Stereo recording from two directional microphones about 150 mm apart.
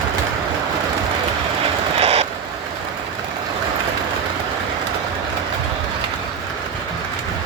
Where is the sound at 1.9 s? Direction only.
45° right (ahead or behind).